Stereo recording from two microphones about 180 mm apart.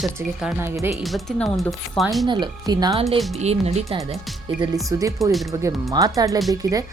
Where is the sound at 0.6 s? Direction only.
15° right (ahead or behind).